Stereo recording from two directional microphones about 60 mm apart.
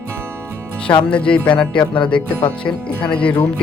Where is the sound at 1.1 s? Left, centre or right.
Centre.